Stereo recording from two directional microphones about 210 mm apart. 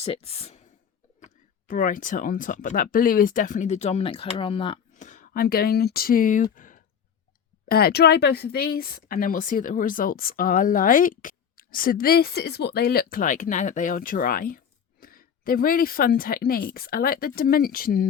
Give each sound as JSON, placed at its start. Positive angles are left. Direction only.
{"t": 0.0, "sound": "speech", "side_deg": 30}
{"t": 4.9, "sound": "speech", "side_deg": 35}